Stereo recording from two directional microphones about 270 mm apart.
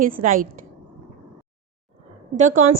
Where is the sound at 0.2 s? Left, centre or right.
Right.